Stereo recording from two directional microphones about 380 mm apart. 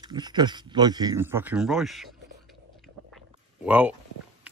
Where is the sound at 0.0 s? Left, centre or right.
Centre.